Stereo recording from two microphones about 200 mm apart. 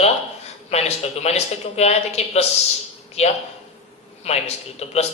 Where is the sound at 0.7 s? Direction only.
30° left (ahead or behind).